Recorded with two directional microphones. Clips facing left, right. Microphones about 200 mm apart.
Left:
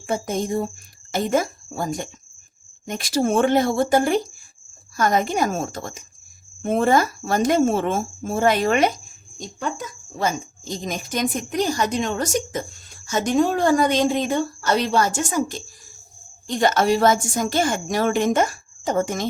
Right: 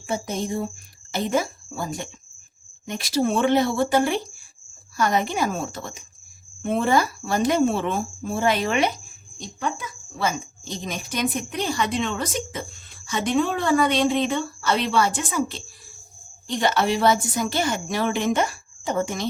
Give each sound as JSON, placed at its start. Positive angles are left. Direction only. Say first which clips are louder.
{"t": 0.1, "sound": "speech", "louder": "left 3 dB", "side_deg": 50}